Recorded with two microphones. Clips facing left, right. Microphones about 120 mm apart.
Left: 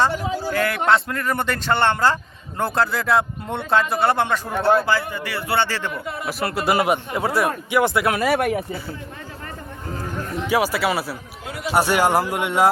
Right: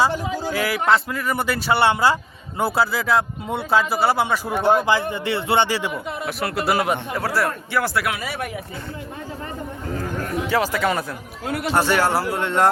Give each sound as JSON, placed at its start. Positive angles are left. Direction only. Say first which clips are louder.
{"t": 0.5, "sound": "a man's voice", "louder": "even", "side_deg": -5}
{"t": 6.2, "sound": "a man's voice", "louder": "left 1 dB", "side_deg": 0}
{"t": 6.9, "sound": "speech", "louder": "left 2 dB", "side_deg": 20}
{"t": 8.2, "sound": "speech", "louder": "left 9 dB", "side_deg": 60}
{"t": 10.5, "sound": "speech", "louder": "left 1 dB", "side_deg": 10}
{"t": 11.4, "sound": "speech", "louder": "right 5 dB", "side_deg": -55}
{"t": 11.7, "sound": "speech", "louder": "left 2 dB", "side_deg": 15}